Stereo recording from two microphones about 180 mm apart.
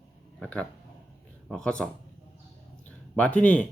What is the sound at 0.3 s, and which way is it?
A man's voice, 5° left (ahead or behind).